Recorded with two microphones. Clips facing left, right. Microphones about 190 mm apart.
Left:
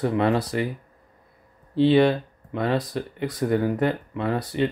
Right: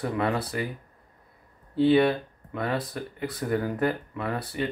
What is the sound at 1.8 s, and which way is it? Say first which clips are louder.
Speech: left 3 dB; 25° left (ahead or behind).